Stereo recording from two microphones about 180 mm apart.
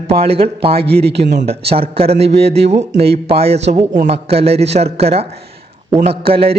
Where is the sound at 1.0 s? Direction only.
70° right (ahead or behind).